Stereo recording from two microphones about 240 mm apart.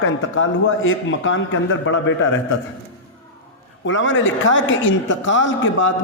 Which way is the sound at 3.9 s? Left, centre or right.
Left.